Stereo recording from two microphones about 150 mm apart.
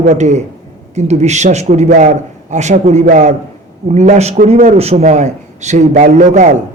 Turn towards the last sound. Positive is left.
turn(degrees=-55)  # may be behind; listen again after turning